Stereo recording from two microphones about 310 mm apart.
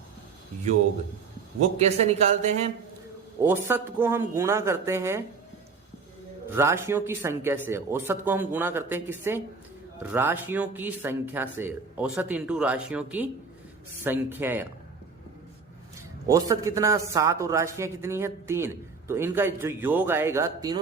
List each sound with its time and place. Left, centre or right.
1.8 s speech: right
3.4 s a man's voice: centre
6.5 s a man's voice: centre
16.2 s a man's voice: centre